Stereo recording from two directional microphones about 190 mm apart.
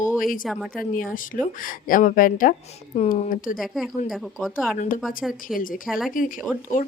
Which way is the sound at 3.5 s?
Centre (ahead or behind).